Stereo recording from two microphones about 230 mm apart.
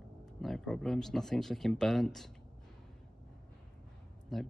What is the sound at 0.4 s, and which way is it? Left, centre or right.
Speech, centre.